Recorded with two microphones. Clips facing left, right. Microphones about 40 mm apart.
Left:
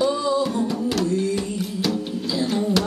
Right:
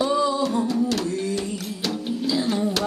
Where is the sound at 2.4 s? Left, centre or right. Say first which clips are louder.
Left 2 dB; centre.